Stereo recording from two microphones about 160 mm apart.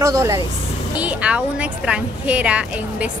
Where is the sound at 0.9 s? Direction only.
10° right (ahead or behind).